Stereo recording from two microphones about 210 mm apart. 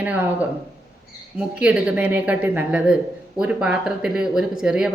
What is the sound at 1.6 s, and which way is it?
Speech, 5° right (ahead or behind).